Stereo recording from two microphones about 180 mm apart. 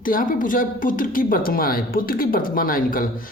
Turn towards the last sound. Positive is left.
turn(degrees=50)  # may be behind; listen again after turning